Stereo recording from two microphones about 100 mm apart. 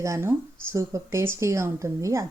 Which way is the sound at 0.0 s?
30° right (ahead or behind).